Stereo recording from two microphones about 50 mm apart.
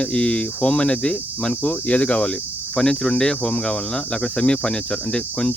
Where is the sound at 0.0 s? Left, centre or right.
Centre.